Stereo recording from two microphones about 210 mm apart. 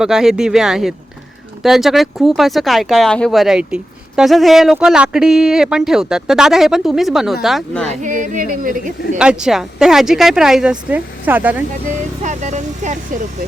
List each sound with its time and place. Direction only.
0.0 s speech: 5° right (ahead or behind)
8.0 s speech: 35° right (ahead or behind)
9.1 s speech: 5° right (ahead or behind)
12.2 s speech: 35° right (ahead or behind)